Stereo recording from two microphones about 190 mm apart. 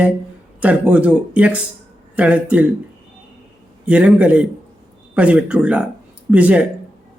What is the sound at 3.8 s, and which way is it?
Speech, 5° right (ahead or behind).